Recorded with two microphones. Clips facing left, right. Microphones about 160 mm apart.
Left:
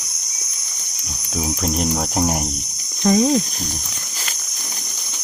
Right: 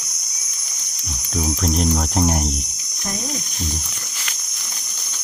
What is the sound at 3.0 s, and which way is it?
Speech, 90° left.